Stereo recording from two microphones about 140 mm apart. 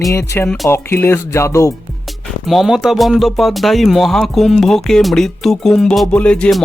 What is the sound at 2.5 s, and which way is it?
Speech, centre (ahead or behind).